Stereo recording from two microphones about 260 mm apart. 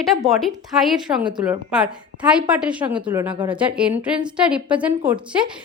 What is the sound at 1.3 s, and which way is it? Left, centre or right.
Speech, centre.